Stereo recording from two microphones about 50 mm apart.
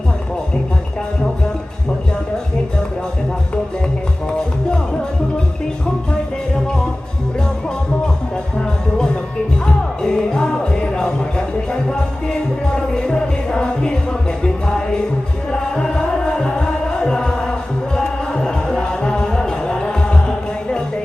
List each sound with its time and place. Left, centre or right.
10.0 s music: centre